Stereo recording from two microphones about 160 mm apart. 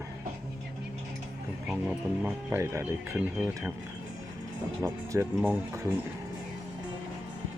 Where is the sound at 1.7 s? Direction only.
5° right (ahead or behind).